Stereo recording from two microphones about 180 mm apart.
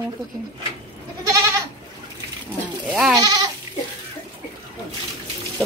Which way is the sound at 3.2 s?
25° right (ahead or behind).